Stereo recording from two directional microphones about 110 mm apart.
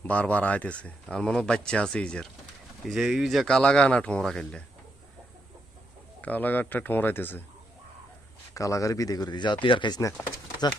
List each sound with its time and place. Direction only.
0.0 s speech: 15° left (ahead or behind)
2.8 s speech: 5° right (ahead or behind)
6.2 s speech: 15° left (ahead or behind)
8.5 s speech: 30° left (ahead or behind); by 10.0 s 45° left (ahead or behind)
10.0 s speech: 25° left (ahead or behind)